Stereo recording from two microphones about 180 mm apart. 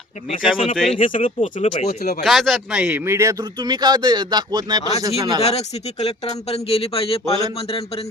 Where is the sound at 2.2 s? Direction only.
Centre (ahead or behind); by 4.8 s 25° right (ahead or behind).